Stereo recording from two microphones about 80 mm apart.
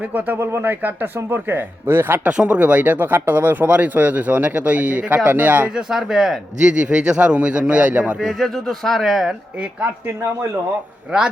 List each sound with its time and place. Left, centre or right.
0.1 s speech: right
2.3 s speech: centre
5.7 s speech: centre
8.2 s speech: centre